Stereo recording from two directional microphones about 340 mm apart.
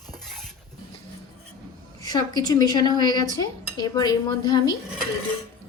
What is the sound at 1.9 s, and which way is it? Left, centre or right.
A woman's voice, centre.